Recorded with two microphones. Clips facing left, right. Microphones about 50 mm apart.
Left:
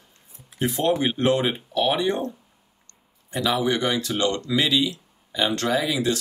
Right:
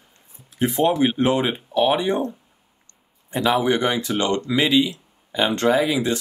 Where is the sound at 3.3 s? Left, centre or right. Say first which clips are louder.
Right 4 dB; right.